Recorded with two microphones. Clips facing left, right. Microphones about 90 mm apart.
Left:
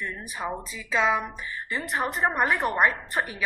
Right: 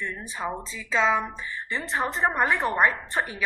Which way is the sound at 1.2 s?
25° right (ahead or behind).